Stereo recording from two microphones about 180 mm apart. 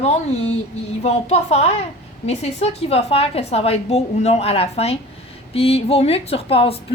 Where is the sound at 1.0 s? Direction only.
35° left (ahead or behind).